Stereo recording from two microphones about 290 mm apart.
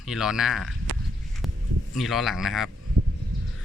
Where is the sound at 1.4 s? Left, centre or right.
Centre.